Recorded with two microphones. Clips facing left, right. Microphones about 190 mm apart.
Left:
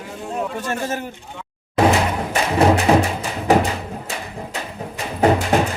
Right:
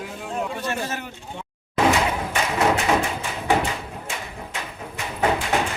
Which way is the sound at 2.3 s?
35° left (ahead or behind).